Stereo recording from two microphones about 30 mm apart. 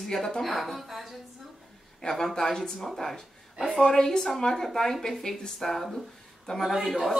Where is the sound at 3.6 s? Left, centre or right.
Centre.